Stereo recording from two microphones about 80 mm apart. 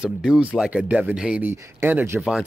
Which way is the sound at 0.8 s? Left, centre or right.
Centre.